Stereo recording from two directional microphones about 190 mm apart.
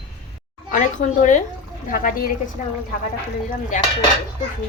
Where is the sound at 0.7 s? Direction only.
40° left (ahead or behind).